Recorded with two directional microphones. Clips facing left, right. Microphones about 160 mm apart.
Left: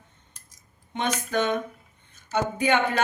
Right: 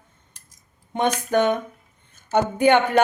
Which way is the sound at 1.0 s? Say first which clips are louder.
Right 6 dB; 55° right (ahead or behind).